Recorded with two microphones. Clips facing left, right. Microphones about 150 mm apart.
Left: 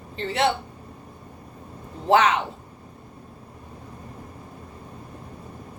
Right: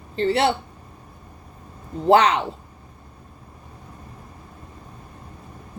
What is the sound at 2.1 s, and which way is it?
Speech, 35° right (ahead or behind).